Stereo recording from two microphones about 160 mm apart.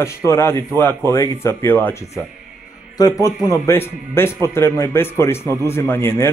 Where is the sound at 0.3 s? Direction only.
15° left (ahead or behind).